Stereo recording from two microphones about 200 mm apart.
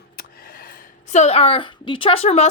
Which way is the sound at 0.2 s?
45° left (ahead or behind).